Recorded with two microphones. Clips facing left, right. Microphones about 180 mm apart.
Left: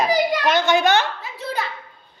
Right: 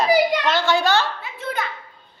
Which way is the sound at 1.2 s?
35° left (ahead or behind).